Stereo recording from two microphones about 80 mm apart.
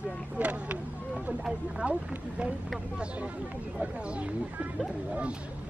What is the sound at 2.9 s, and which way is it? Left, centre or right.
Speech, centre.